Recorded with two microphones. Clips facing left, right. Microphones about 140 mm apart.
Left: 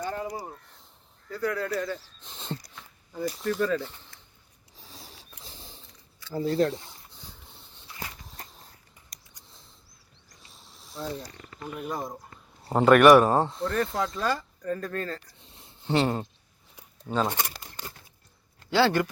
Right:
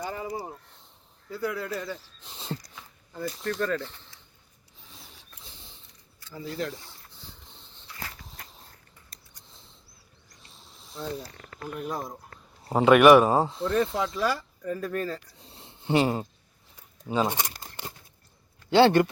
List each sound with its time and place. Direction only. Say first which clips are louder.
0.0 s a sound: left 2 dB; 10° right (ahead or behind)
1.3 s speech: left 2 dB; 5° right (ahead or behind)
3.1 s speech: left 2 dB; 10° left (ahead or behind)
6.3 s speech: left 9 dB; 35° left (ahead or behind)
6.7 s a sound: left 4 dB; 20° left (ahead or behind)
10.7 s speech: even; centre (ahead or behind)
15.4 s a sound: right 4 dB; 35° right (ahead or behind)
15.9 s speech: right 1 dB; 5° right (ahead or behind)
17.2 s tearing: right 1 dB; 15° right (ahead or behind)
18.7 s speech: right 4 dB; 20° right (ahead or behind)